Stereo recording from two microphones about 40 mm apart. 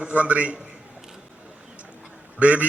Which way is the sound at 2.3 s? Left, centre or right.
Right.